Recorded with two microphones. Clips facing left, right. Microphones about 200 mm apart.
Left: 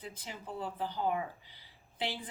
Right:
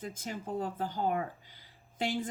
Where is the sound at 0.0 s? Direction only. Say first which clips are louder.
Right 6 dB; 45° right (ahead or behind).